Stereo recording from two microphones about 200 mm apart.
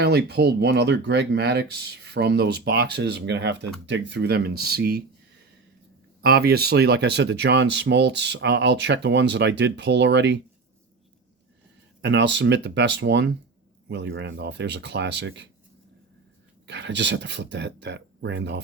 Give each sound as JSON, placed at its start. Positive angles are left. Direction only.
{"t": 0.0, "sound": "speech", "side_deg": -55}
{"t": 6.2, "sound": "speech", "side_deg": -50}
{"t": 12.0, "sound": "speech", "side_deg": -60}
{"t": 16.6, "sound": "speech", "side_deg": -60}